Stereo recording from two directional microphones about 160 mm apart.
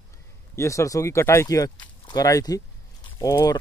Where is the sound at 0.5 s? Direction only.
20° left (ahead or behind).